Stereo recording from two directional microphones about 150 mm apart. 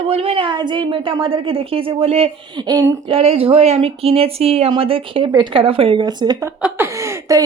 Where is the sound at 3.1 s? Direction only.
40° right (ahead or behind).